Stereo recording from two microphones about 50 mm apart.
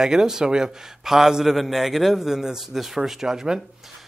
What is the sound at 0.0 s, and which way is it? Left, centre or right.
A man's voice, centre.